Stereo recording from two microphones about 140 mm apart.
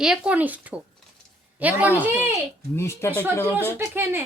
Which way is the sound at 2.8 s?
15° left (ahead or behind).